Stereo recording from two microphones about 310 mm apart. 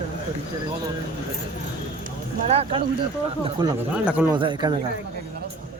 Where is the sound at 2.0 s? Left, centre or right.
Centre.